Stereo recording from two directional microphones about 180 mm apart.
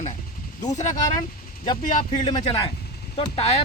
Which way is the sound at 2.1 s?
30° left (ahead or behind).